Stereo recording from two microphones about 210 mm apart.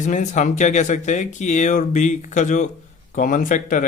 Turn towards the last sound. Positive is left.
turn(degrees=40)  # may be behind; listen again after turning